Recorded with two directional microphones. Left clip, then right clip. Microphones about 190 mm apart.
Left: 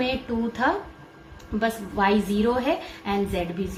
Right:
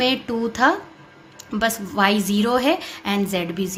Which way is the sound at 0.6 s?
55° right (ahead or behind).